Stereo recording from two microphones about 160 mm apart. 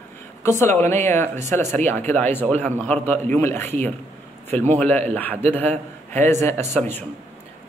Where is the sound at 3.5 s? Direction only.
45° right (ahead or behind).